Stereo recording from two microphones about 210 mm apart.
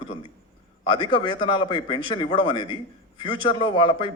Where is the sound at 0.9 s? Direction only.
25° left (ahead or behind).